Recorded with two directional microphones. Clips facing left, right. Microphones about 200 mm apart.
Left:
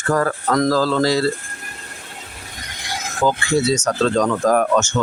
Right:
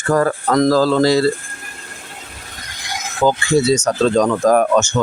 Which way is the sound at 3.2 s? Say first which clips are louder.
Right 3 dB; 35° right (ahead or behind).